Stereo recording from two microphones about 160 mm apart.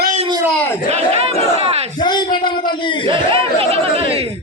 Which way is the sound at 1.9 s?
25° left (ahead or behind).